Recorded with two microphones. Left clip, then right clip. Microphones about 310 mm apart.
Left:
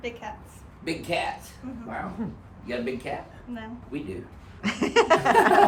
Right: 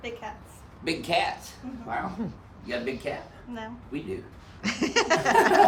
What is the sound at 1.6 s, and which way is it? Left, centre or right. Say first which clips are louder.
Speech: right 3 dB; centre.